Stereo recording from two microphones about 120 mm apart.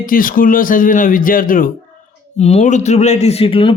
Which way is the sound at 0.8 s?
90° left.